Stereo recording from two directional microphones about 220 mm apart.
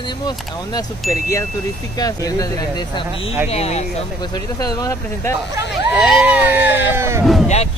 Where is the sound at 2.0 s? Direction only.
15° left (ahead or behind).